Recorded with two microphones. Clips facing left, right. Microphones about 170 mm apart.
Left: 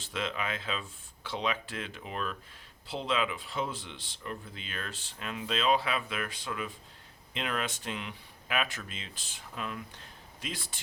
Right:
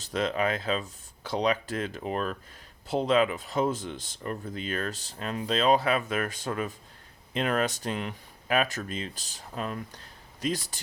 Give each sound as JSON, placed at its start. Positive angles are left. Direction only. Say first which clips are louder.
{"t": 0.0, "sound": "speech", "louder": "right 8 dB", "side_deg": -40}